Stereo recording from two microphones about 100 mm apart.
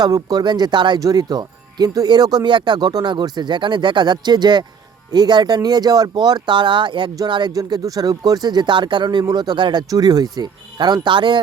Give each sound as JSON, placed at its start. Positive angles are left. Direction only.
{"t": 0.0, "sound": "speech", "side_deg": -40}
{"t": 7.5, "sound": "speech", "side_deg": -35}